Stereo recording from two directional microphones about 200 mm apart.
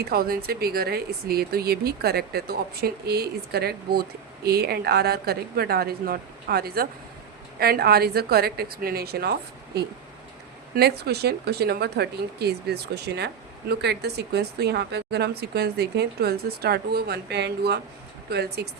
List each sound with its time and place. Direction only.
0.0 s speech: 50° right (ahead or behind)
10.8 s speech: 55° right (ahead or behind)